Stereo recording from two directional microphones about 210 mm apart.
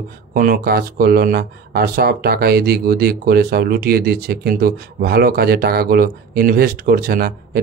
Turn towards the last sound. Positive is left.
turn(degrees=-45)  # may be behind; listen again after turning